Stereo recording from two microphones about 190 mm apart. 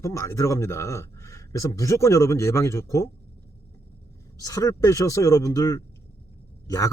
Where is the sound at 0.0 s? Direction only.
15° left (ahead or behind).